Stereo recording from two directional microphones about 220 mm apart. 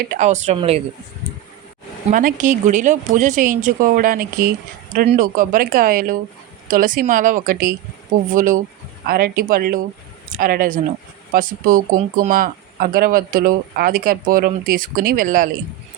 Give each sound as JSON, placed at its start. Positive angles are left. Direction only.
{"t": 0.2, "sound": "speech", "side_deg": -30}
{"t": 2.0, "sound": "speech", "side_deg": -35}